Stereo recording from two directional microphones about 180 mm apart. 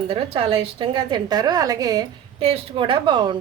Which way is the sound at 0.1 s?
30° right (ahead or behind).